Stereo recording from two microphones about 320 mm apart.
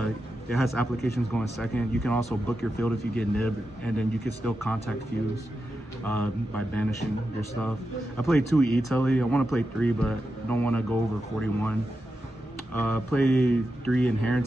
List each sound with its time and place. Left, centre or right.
0.0 s speech: centre
6.0 s speech: centre
8.2 s speech: centre
12.7 s speech: centre